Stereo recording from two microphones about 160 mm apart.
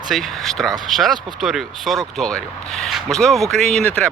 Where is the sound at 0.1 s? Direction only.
Centre (ahead or behind).